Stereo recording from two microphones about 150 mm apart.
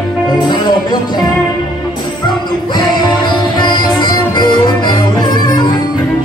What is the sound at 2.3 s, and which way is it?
Music, 30° left (ahead or behind).